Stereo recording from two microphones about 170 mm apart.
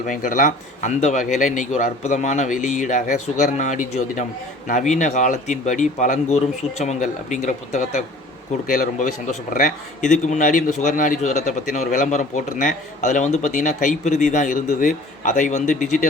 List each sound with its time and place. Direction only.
0.1 s a man's voice: 50° left (ahead or behind)
8.6 s a man's voice: 55° left (ahead or behind)